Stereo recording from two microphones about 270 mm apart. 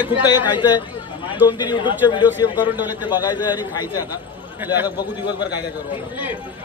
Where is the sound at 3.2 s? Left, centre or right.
Centre.